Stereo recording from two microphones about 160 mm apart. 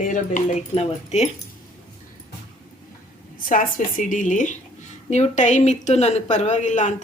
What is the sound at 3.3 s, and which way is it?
A woman's voice, 55° left (ahead or behind).